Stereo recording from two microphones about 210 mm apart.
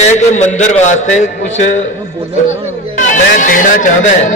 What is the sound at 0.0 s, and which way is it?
A man's voice, 35° left (ahead or behind).